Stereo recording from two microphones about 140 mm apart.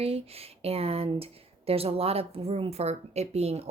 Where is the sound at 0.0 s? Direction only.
45° right (ahead or behind).